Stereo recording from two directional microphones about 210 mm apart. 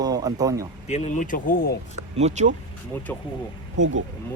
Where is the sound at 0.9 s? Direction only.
35° left (ahead or behind).